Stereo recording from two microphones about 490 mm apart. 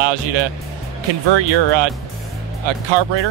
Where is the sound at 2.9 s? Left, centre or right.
Right.